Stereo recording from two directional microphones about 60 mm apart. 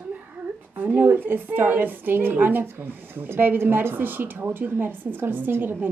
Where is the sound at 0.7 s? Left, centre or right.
Right.